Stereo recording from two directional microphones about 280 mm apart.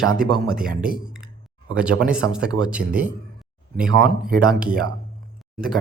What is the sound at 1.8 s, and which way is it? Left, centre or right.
Speech, centre.